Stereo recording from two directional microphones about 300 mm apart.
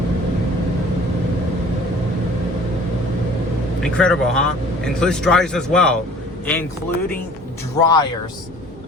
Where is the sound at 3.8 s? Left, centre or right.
Centre.